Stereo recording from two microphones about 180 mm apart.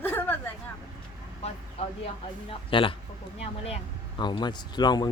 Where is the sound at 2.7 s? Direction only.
30° left (ahead or behind).